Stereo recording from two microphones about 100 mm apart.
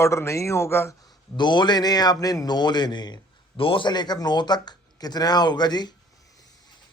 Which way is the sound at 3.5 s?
60° left (ahead or behind).